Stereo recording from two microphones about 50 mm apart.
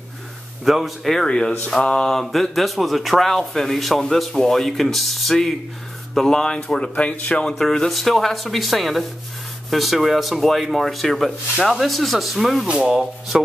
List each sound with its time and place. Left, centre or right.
0.7 s a man's voice: centre
1.2 s speech: centre
2.1 s a man's voice: centre; by 7.5 s left
7.5 s a man's voice: centre
12.6 s speech: centre